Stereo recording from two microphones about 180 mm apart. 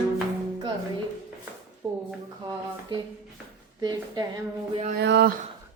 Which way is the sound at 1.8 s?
30° right (ahead or behind).